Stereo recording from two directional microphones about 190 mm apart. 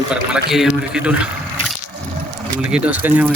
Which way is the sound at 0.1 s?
5° right (ahead or behind).